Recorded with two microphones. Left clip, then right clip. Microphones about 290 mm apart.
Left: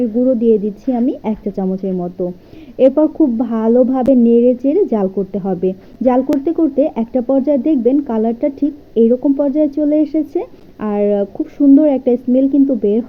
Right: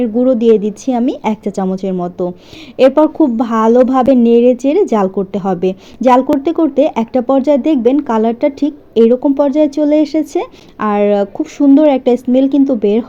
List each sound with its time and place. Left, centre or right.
0.0 s speech: right